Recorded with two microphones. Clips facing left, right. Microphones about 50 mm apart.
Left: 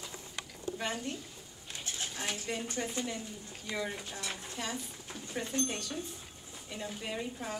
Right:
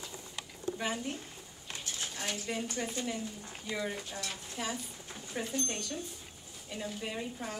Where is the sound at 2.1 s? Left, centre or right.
Centre.